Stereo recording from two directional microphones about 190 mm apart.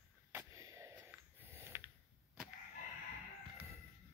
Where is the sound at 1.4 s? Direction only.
10° right (ahead or behind).